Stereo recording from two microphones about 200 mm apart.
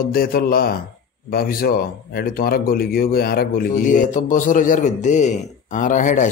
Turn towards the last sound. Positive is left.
turn(degrees=40)  # may be behind; listen again after turning